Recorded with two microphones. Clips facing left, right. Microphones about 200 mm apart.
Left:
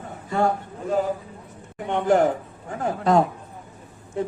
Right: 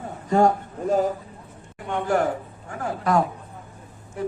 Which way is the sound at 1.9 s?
20° left (ahead or behind).